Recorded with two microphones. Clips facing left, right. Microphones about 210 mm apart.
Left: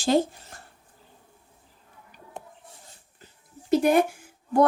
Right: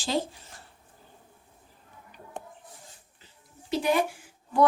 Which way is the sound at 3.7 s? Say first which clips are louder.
Left 6 dB; 50° left (ahead or behind).